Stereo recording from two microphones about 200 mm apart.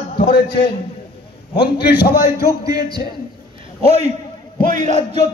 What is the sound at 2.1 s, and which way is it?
Speech, 15° right (ahead or behind).